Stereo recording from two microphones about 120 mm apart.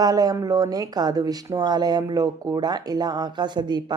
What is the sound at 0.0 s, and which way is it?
Speech, 30° right (ahead or behind).